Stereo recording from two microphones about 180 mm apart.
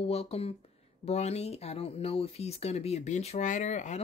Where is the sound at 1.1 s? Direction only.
35° left (ahead or behind).